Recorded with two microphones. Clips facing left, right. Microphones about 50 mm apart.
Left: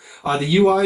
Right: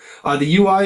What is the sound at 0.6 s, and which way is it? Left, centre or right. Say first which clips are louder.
Speech: even; centre.